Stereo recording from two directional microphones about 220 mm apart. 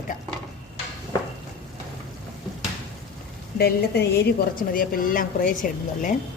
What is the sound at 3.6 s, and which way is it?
A woman's voice, 45° left (ahead or behind).